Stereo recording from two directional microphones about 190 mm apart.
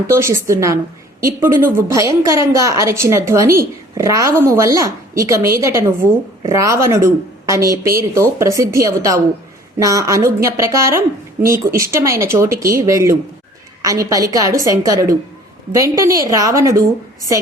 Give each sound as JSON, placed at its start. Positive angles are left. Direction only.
{"t": 0.1, "sound": "a woman's voice", "side_deg": -15}